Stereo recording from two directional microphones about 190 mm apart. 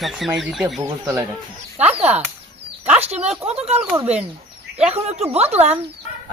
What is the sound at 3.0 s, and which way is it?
Speech, 35° right (ahead or behind).